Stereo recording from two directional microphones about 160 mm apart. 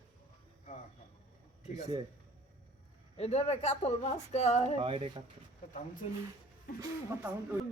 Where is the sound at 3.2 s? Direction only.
40° left (ahead or behind).